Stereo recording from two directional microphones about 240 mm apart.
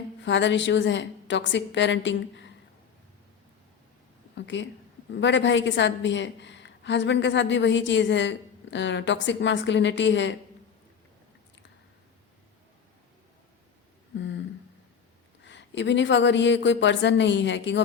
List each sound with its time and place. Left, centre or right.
0.2 s a woman's voice: left
4.4 s a woman's voice: left
14.2 s a sound: left
15.4 s a woman's voice: left